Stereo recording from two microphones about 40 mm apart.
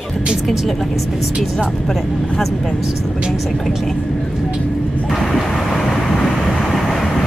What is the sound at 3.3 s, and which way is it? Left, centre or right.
Speech, centre.